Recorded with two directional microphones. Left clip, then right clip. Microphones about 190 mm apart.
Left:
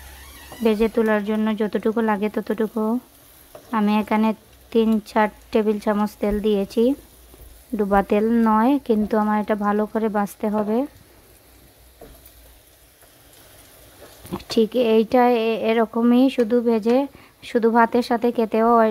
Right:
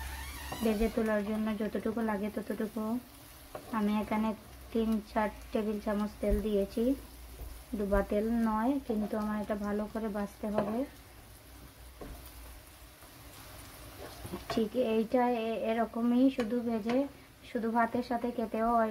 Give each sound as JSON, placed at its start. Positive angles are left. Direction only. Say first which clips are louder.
{"t": 0.7, "sound": "speech", "louder": "left 12 dB", "side_deg": 50}
{"t": 7.9, "sound": "speech", "louder": "left 12 dB", "side_deg": 55}
{"t": 14.5, "sound": "speech", "louder": "left 13 dB", "side_deg": 55}